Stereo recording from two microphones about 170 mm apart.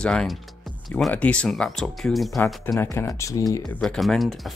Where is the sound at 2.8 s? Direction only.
15° left (ahead or behind).